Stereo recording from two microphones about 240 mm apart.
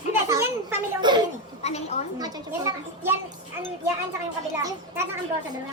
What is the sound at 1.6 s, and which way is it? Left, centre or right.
Speech, left.